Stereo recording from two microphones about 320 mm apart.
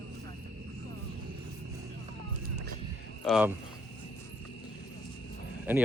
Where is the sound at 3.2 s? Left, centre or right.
Centre.